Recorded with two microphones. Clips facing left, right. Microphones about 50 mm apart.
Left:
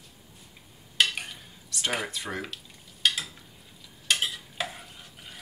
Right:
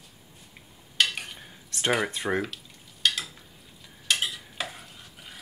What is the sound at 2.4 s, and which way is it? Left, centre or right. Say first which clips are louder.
Stir: right 3 dB; centre.